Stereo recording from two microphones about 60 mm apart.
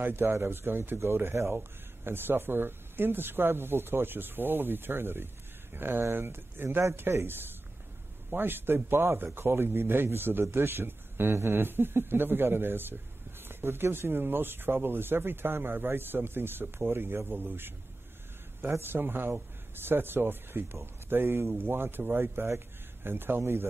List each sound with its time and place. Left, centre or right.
0.0 s a man's voice: right